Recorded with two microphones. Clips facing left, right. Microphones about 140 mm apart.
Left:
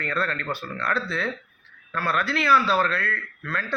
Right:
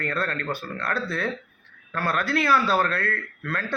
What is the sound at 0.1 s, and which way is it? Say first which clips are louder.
Speech: even; 45° right (ahead or behind).